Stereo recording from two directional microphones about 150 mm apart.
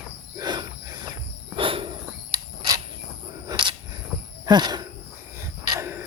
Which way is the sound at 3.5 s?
30° right (ahead or behind).